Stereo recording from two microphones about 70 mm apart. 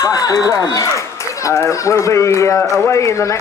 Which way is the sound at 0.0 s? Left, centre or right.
Left.